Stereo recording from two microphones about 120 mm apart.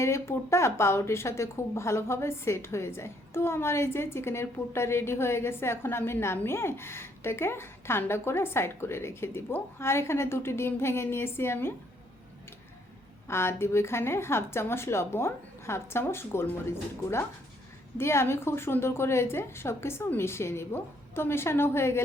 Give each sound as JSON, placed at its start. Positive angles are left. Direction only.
{"t": 0.0, "sound": "a woman's voice", "side_deg": 25}
{"t": 13.2, "sound": "a woman's voice", "side_deg": 20}